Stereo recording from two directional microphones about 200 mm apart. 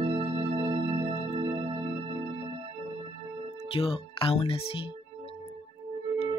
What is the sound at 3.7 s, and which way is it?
Speech, 25° left (ahead or behind).